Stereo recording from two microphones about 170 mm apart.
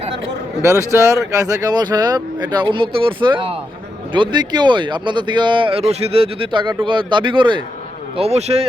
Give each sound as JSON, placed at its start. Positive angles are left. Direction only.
{"t": 0.6, "sound": "a man's voice", "side_deg": -15}